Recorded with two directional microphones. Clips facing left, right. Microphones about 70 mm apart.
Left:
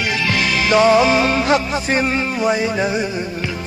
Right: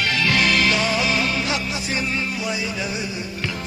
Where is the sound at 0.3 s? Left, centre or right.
Centre.